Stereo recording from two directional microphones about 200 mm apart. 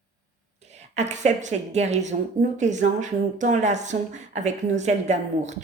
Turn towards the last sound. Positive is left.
turn(degrees=-35)  # may be behind; listen again after turning